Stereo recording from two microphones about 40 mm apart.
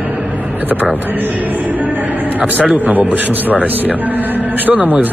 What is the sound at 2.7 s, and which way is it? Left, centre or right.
Speech, right.